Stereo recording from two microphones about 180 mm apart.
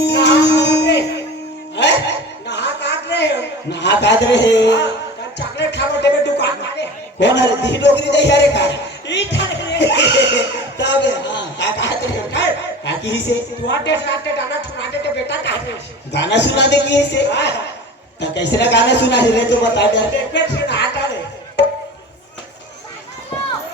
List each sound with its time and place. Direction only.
0.0 s music: 75° left (ahead or behind)
1.7 s a sound: 75° left (ahead or behind)
5.5 s music: 75° left (ahead or behind)
12.3 s speech: 75° left (ahead or behind)
16.1 s a man's voice: 70° left (ahead or behind)